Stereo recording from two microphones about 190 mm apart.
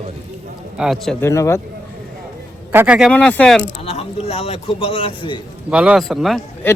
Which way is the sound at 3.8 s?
30° left (ahead or behind).